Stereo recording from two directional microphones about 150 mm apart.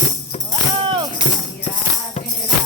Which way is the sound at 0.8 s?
35° right (ahead or behind).